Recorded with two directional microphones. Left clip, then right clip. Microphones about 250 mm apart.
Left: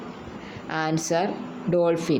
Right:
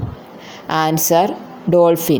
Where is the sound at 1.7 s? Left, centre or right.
Right.